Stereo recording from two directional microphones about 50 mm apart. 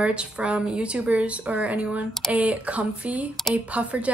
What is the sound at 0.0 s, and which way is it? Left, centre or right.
A woman's voice, right.